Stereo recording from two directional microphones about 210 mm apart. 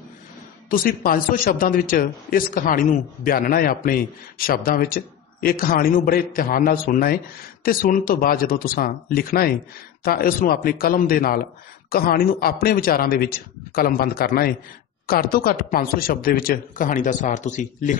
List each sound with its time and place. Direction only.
0.7 s speech: 45° left (ahead or behind)